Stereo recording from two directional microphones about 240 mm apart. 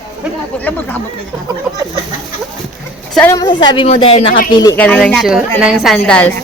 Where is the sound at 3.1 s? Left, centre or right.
Centre.